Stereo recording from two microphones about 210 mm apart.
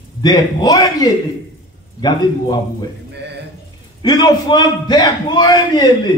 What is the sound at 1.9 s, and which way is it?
Speech, 20° left (ahead or behind).